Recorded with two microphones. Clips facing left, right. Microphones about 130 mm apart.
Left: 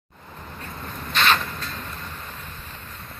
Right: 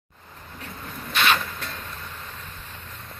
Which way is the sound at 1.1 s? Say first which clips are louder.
Left 1 dB; 10° right (ahead or behind).